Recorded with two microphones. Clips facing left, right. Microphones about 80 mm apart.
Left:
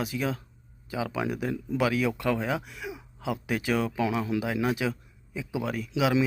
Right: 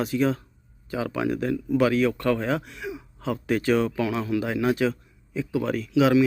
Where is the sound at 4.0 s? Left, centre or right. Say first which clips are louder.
Right 2 dB; centre.